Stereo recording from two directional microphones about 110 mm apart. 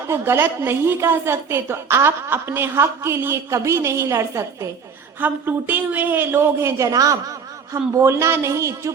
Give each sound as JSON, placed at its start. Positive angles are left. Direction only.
{"t": 0.1, "sound": "a woman's voice", "side_deg": -20}
{"t": 5.2, "sound": "a woman's voice", "side_deg": -15}